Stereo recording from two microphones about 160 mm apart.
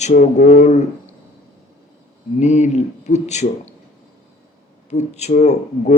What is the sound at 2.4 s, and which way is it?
Speech, 45° left (ahead or behind).